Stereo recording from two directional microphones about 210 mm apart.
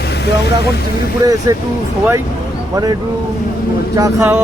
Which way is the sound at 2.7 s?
15° right (ahead or behind).